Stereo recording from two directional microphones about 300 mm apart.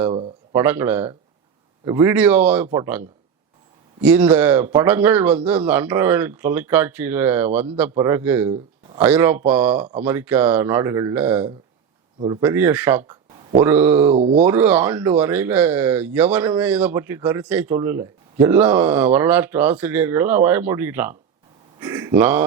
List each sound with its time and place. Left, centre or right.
0.5 s speech: centre
4.0 s speech: centre
14.1 s speech: centre
14.4 s speech: centre